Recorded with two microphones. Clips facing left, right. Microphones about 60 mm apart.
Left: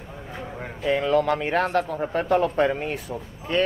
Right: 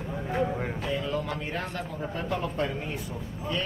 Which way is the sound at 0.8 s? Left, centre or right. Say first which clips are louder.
Left 12 dB; left.